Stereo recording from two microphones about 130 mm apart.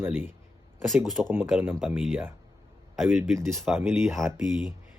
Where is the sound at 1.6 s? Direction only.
15° right (ahead or behind).